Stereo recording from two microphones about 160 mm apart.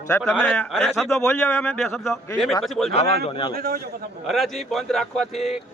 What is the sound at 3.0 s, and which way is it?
Speech, 40° left (ahead or behind).